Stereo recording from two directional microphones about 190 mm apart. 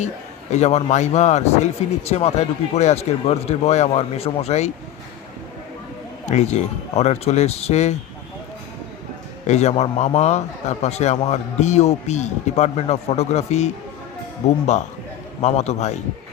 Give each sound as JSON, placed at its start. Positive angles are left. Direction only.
{"t": 0.5, "sound": "speech", "side_deg": 35}
{"t": 6.2, "sound": "speech", "side_deg": 35}
{"t": 9.5, "sound": "speech", "side_deg": 35}